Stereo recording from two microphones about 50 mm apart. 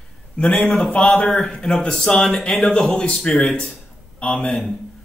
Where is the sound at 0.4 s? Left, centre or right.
Centre.